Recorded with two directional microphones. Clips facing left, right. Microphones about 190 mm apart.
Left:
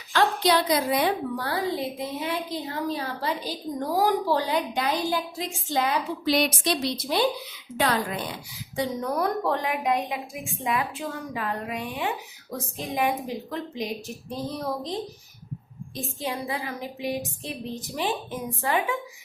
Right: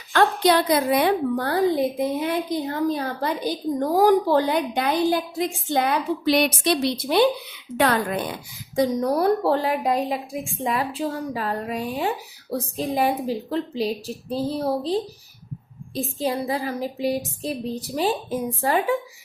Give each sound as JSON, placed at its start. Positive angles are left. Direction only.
{"t": 0.1, "sound": "a woman's voice", "side_deg": -55}
{"t": 16.0, "sound": "a woman's voice", "side_deg": -35}